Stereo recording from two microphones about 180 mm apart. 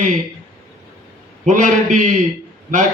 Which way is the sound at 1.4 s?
45° right (ahead or behind).